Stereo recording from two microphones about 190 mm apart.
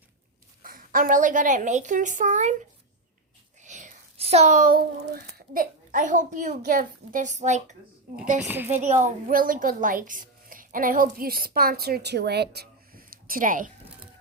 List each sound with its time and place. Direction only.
0.6 s a woman's voice: 50° right (ahead or behind)
8.4 s a woman's voice: 10° right (ahead or behind)
8.7 s a woman's voice: 40° right (ahead or behind)